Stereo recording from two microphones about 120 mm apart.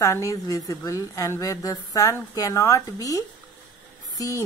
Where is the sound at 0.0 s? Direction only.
25° left (ahead or behind).